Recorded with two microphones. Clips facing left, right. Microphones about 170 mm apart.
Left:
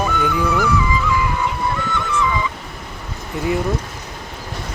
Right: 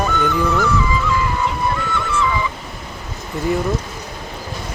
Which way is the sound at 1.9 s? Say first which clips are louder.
Even; 15° left (ahead or behind).